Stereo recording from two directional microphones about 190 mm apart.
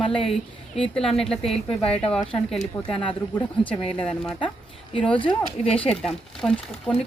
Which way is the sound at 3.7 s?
5° left (ahead or behind).